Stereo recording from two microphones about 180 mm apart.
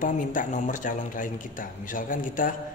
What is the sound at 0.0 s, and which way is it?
Speech, 45° left (ahead or behind).